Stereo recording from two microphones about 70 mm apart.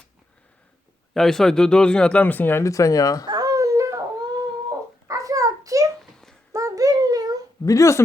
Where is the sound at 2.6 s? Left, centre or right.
Left.